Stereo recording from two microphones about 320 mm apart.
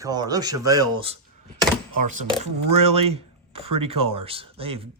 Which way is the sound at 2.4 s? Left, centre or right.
Right.